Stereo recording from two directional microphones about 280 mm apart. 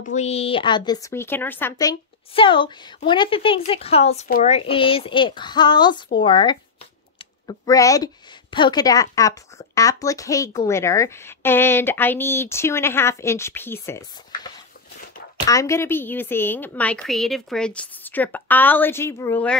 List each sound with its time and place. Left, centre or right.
0.0 s a woman's voice: left; by 19.5 s centre